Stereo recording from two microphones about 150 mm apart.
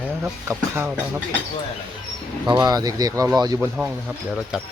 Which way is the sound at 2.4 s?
30° right (ahead or behind).